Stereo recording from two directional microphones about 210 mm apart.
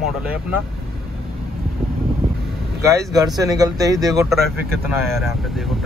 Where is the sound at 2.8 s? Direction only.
15° right (ahead or behind).